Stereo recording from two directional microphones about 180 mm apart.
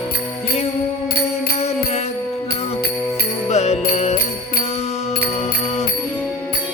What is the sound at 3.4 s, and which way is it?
Music, 40° left (ahead or behind).